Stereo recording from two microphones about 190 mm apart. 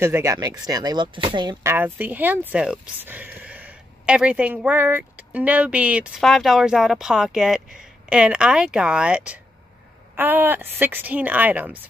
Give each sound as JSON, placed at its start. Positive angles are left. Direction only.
{"t": 0.0, "sound": "speech", "side_deg": -15}